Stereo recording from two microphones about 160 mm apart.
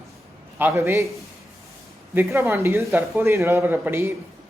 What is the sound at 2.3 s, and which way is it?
A man's voice, 15° right (ahead or behind).